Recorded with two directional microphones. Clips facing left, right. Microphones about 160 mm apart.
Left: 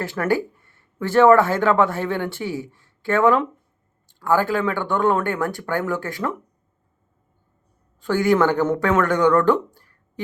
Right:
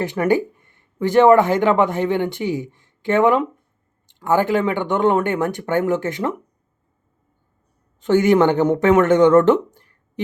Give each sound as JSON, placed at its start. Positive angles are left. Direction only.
{"t": 0.0, "sound": "speech", "side_deg": -20}
{"t": 8.0, "sound": "speech", "side_deg": -20}